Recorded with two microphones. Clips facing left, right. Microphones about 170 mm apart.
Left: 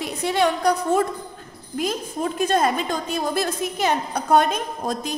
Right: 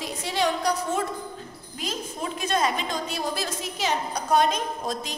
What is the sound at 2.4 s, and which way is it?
A woman's voice, 50° left (ahead or behind).